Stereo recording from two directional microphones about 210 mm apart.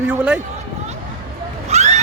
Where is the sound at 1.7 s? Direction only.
30° right (ahead or behind).